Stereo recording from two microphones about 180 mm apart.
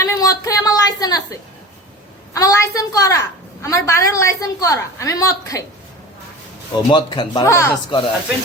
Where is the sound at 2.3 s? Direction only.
20° left (ahead or behind).